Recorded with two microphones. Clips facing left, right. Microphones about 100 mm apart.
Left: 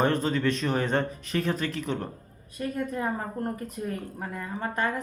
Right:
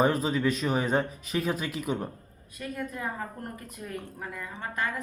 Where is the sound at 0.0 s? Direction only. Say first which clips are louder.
Even; 5° right (ahead or behind).